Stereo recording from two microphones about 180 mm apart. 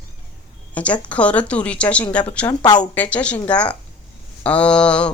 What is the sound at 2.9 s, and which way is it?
Speech, 10° left (ahead or behind).